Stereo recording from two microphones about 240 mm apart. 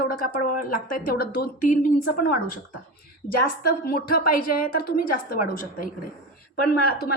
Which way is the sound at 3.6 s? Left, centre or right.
Left.